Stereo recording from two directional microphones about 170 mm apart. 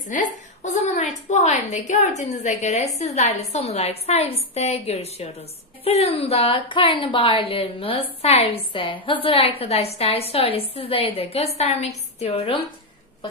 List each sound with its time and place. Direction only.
0.0 s a woman's voice: 50° left (ahead or behind)